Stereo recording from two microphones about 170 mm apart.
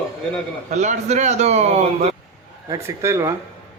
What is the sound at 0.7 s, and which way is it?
A man's voice, 45° right (ahead or behind).